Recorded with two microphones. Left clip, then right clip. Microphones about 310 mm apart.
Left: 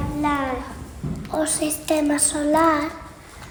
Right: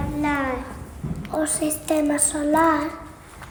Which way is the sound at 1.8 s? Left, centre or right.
Centre.